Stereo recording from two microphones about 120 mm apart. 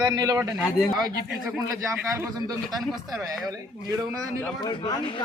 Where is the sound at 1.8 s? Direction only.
20° right (ahead or behind).